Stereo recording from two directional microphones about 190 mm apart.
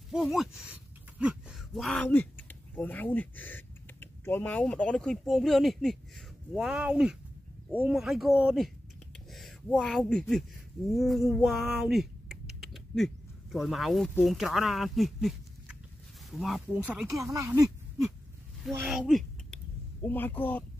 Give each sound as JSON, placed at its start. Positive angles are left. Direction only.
{"t": 0.1, "sound": "speech", "side_deg": -5}
{"t": 10.9, "sound": "typing", "side_deg": 0}
{"t": 16.3, "sound": "speech", "side_deg": 0}
{"t": 18.9, "sound": "a sound", "side_deg": 0}
{"t": 20.0, "sound": "speech", "side_deg": 10}